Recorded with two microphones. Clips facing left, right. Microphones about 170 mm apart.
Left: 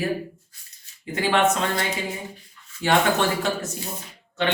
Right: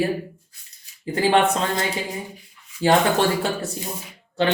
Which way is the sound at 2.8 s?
35° right (ahead or behind).